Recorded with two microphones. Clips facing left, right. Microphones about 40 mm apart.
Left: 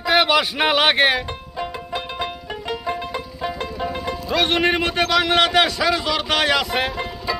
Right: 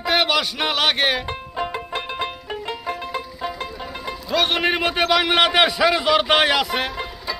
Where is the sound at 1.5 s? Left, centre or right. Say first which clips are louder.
Right 1 dB; right.